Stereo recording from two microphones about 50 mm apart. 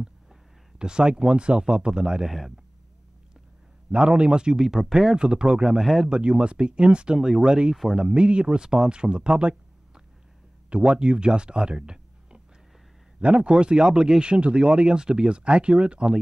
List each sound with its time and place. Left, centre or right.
0.0 s speech: centre
4.2 s speech: centre
5.7 s speech: centre
6.0 s speech: centre
7.2 s speech: centre
7.4 s speech: centre